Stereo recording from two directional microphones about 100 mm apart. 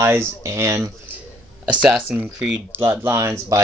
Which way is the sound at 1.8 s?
10° right (ahead or behind).